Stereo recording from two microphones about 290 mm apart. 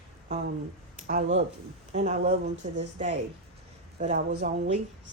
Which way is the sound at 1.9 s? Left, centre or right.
Right.